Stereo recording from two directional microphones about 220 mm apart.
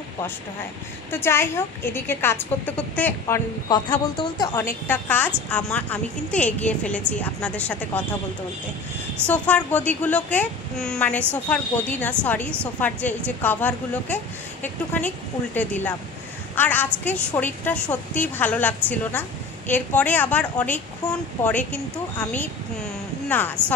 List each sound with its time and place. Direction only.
1.1 s a woman's voice: 10° left (ahead or behind)
9.3 s a woman's voice: 5° left (ahead or behind)